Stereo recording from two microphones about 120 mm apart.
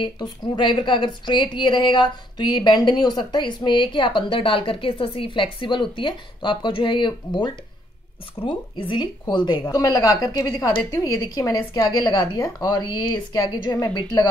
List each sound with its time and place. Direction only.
0.0 s a woman's voice: 40° left (ahead or behind)